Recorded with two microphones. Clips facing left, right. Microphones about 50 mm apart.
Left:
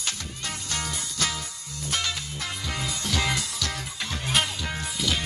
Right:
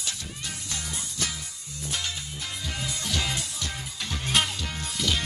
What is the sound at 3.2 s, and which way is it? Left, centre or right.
Music, left.